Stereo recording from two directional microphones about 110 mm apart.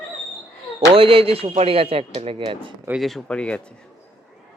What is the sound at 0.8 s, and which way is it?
Speech, 55° right (ahead or behind).